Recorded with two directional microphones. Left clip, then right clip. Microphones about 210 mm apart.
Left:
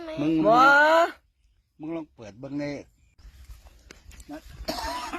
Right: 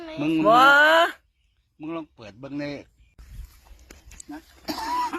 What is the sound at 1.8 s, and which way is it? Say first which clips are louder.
A woman's voice: right 1 dB; 15° left (ahead or behind).